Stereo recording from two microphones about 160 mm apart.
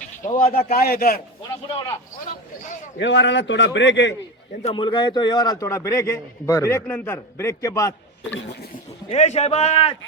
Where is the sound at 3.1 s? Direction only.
90° left.